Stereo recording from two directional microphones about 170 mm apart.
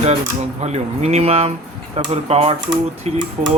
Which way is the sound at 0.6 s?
40° right (ahead or behind).